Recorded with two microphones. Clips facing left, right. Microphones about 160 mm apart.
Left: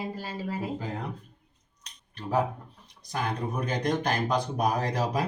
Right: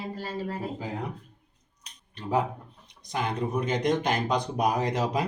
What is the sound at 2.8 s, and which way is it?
A man's voice, 20° right (ahead or behind).